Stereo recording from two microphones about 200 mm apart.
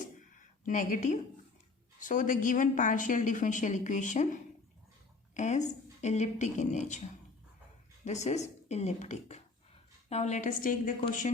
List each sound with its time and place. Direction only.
0.6 s a woman's voice: 40° left (ahead or behind)
8.0 s a woman's voice: 35° left (ahead or behind)